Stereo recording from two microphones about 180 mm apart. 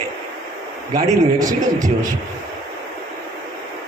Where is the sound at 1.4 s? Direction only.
20° right (ahead or behind).